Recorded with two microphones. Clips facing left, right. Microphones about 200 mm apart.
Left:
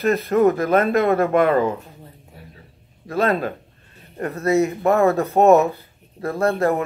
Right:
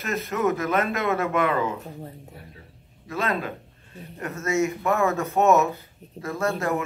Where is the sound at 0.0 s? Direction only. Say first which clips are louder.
Left 9 dB; 35° left (ahead or behind).